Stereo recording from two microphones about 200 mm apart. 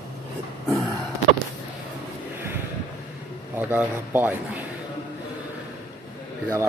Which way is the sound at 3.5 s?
10° right (ahead or behind).